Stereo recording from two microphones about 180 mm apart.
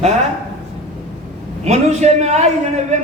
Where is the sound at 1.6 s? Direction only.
40° right (ahead or behind).